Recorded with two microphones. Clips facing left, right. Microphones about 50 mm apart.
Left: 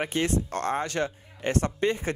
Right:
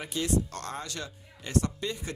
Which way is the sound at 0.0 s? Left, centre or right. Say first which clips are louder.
Left 3 dB; left.